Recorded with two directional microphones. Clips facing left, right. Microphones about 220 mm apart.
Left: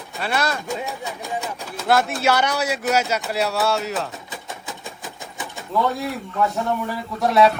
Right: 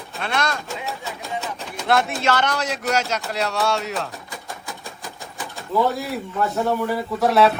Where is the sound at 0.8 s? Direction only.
15° left (ahead or behind).